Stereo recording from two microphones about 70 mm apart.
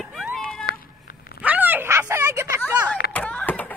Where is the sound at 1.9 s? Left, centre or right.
Right.